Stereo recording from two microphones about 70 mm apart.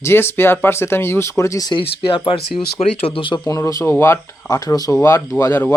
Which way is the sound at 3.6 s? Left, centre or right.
Left.